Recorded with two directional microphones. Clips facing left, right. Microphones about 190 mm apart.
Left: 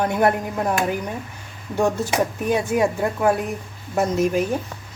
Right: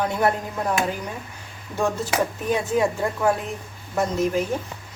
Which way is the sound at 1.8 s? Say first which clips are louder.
Left 3 dB; 15° left (ahead or behind).